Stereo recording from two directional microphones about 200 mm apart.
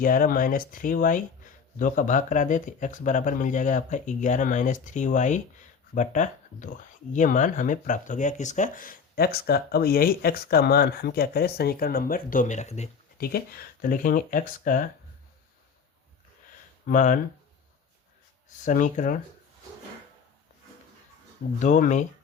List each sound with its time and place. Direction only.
0.0 s speech: 45° left (ahead or behind)
13.1 s speech: 50° left (ahead or behind)
16.8 s speech: 40° left (ahead or behind)
18.6 s speech: 40° left (ahead or behind)
21.6 s speech: 40° left (ahead or behind)